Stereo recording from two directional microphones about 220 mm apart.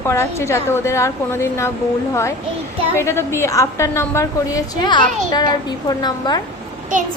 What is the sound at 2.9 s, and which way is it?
A woman's voice, 10° left (ahead or behind).